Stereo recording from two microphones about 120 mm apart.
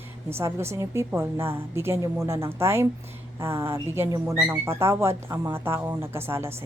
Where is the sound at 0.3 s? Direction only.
20° right (ahead or behind).